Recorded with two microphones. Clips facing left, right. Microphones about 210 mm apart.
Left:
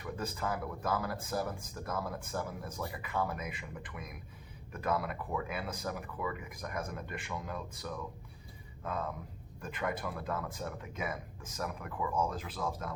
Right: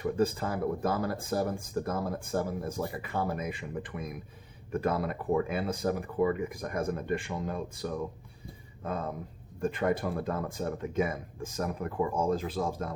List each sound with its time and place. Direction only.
0.0 s speech: 35° right (ahead or behind)